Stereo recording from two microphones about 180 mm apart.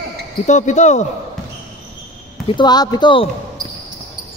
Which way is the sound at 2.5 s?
25° left (ahead or behind).